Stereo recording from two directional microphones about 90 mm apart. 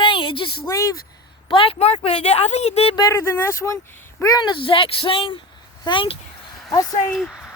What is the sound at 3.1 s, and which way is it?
Speech, 30° left (ahead or behind).